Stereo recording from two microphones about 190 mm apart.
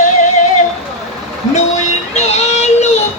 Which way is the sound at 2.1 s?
35° left (ahead or behind).